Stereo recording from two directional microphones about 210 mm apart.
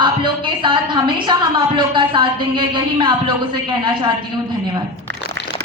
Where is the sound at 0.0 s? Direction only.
25° right (ahead or behind).